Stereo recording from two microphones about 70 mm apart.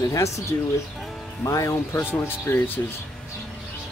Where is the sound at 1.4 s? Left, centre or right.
Left.